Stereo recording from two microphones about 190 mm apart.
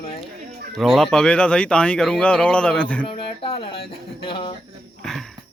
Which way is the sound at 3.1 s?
30° left (ahead or behind).